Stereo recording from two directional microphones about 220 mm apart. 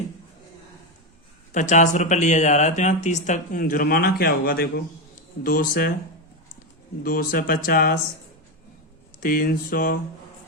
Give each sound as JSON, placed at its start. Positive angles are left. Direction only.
{"t": 1.5, "sound": "speech", "side_deg": 35}
{"t": 7.0, "sound": "speech", "side_deg": 40}
{"t": 9.2, "sound": "speech", "side_deg": 40}